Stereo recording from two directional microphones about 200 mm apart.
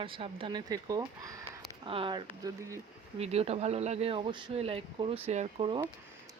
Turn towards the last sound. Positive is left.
turn(degrees=-25)  # may be behind; listen again after turning